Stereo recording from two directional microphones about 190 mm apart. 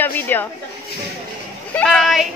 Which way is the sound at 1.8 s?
Centre (ahead or behind).